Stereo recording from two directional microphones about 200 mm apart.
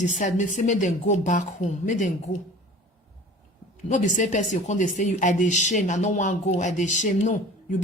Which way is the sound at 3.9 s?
40° left (ahead or behind).